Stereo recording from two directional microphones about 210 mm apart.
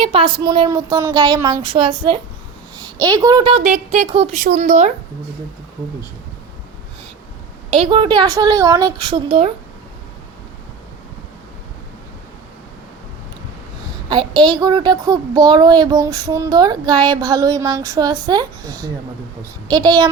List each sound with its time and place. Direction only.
0.0 s a child's voice: 25° right (ahead or behind)
7.7 s a child's voice: 25° right (ahead or behind)
14.1 s a child's voice: 20° right (ahead or behind)